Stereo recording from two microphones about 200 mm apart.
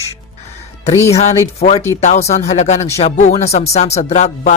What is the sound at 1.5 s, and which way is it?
Speech, 30° left (ahead or behind).